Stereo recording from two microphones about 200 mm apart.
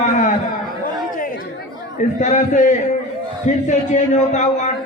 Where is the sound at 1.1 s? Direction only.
45° left (ahead or behind).